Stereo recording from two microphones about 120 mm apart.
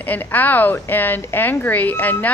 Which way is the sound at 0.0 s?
15° left (ahead or behind).